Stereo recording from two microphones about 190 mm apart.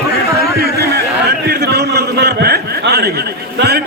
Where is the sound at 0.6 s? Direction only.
60° right (ahead or behind).